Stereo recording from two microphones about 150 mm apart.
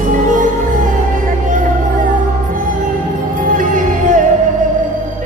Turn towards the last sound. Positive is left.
turn(degrees=-60)  # may be behind; listen again after turning